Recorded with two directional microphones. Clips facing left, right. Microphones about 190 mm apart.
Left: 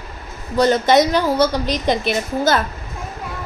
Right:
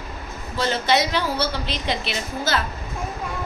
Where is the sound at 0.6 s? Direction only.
45° left (ahead or behind).